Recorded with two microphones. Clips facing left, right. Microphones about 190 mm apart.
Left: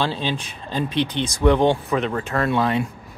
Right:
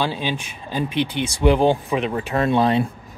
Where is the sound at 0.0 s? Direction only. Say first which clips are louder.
Even; 10° right (ahead or behind); by 2.9 s 30° right (ahead or behind).